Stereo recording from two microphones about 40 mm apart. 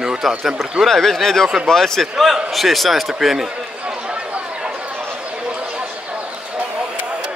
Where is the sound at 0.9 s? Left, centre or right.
Centre.